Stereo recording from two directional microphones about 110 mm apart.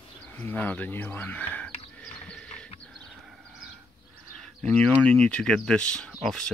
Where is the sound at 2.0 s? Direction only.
10° left (ahead or behind).